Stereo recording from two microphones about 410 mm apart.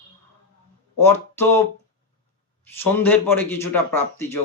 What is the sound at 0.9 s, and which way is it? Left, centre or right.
Speech, centre.